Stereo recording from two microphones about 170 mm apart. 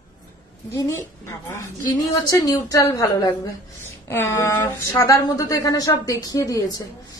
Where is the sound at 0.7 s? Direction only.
15° left (ahead or behind).